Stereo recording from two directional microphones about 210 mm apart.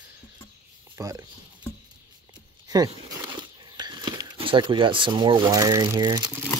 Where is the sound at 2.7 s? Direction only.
20° right (ahead or behind).